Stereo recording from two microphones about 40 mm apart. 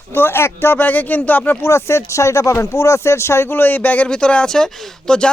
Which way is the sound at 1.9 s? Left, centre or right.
Left.